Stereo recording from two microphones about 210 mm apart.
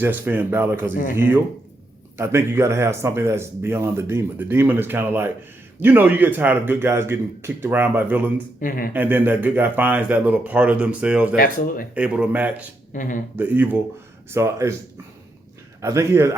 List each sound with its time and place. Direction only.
0.0 s speech: 10° right (ahead or behind)
2.1 s speech: 10° right (ahead or behind)
8.6 s speech: 45° left (ahead or behind)
8.9 s speech: 10° right (ahead or behind)
11.3 s speech: 45° left (ahead or behind)
11.9 s speech: 5° right (ahead or behind)
12.9 s speech: 40° left (ahead or behind)
13.3 s speech: 10° right (ahead or behind)
15.8 s speech: 15° right (ahead or behind)